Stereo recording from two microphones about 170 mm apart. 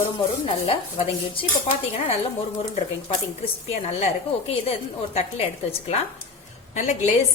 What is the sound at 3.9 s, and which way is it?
A woman's voice, 35° left (ahead or behind).